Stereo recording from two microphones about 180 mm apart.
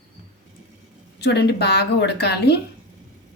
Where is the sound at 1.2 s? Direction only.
65° left (ahead or behind).